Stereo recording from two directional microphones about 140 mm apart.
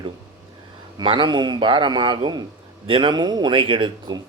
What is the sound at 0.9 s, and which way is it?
A man's voice, 35° right (ahead or behind).